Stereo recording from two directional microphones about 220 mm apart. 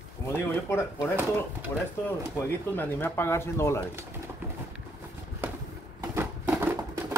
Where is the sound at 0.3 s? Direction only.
10° left (ahead or behind).